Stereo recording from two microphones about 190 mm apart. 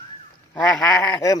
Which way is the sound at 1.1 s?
20° left (ahead or behind).